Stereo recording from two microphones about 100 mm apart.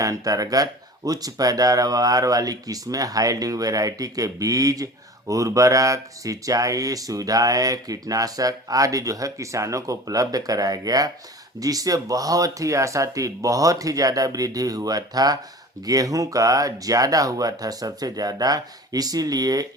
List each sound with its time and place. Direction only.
0.0 s speech: 35° right (ahead or behind)